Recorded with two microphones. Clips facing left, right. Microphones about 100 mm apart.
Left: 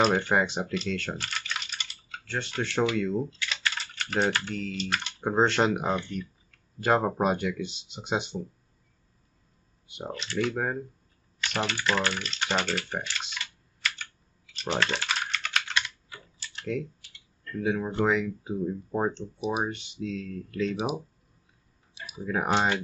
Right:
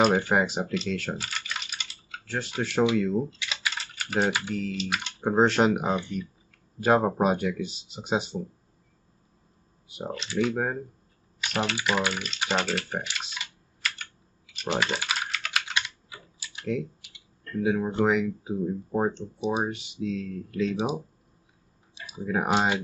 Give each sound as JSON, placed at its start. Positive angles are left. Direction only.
{"t": 0.0, "sound": "speech", "side_deg": -5}
{"t": 3.4, "sound": "typing", "side_deg": -5}
{"t": 5.0, "sound": "speech", "side_deg": -5}
{"t": 9.8, "sound": "speech", "side_deg": -5}
{"t": 13.0, "sound": "computer keyboard", "side_deg": -10}
{"t": 16.1, "sound": "typing", "side_deg": -10}
{"t": 17.6, "sound": "speech", "side_deg": -5}
{"t": 22.2, "sound": "speech", "side_deg": -10}